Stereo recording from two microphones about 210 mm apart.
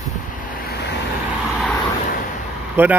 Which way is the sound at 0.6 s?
45° left (ahead or behind).